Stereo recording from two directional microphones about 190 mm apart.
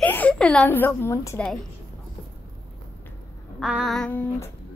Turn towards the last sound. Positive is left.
turn(degrees=10)  # may be behind; listen again after turning